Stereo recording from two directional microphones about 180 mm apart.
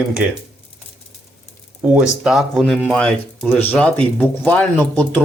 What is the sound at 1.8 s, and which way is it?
Speech, 10° right (ahead or behind).